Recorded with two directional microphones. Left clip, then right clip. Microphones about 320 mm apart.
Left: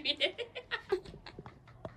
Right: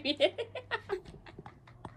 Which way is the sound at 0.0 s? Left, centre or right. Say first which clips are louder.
Right 3 dB; centre.